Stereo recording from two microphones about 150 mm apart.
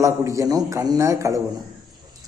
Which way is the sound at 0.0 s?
20° right (ahead or behind).